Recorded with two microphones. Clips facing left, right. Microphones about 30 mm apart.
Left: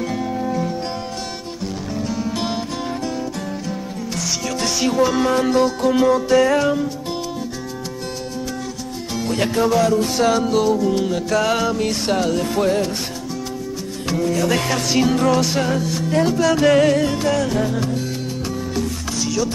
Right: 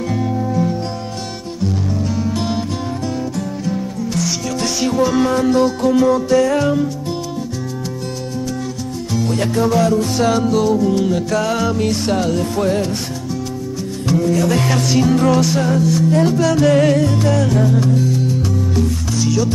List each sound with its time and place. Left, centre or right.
0.1 s music: centre
2.0 s music: centre
3.6 s music: centre
5.9 s music: centre
9.1 s music: centre
14.0 s music: centre
15.5 s music: centre
16.2 s music: centre